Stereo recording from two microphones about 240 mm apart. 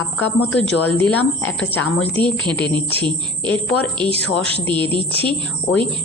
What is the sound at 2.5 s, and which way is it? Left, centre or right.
Speech, centre.